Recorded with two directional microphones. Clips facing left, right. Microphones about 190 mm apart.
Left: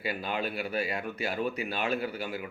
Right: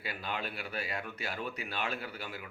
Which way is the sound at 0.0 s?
10° left (ahead or behind).